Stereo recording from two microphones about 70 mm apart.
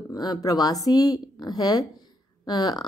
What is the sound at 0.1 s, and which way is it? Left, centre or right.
A woman's voice, left.